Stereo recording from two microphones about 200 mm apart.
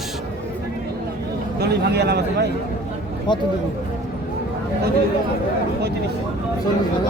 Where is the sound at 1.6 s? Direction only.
55° right (ahead or behind).